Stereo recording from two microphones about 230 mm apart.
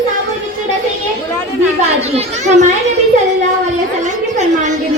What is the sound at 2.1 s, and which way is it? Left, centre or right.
Speech, right.